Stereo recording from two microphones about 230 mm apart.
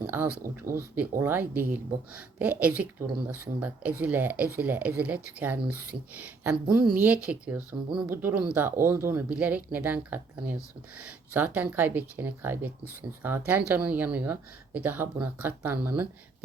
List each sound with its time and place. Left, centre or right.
0.0 s speech: centre